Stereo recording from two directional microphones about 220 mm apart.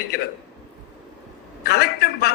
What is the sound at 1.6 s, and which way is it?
Speech, 45° left (ahead or behind).